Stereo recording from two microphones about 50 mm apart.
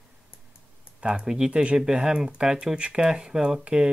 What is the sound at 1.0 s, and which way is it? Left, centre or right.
Speech, centre.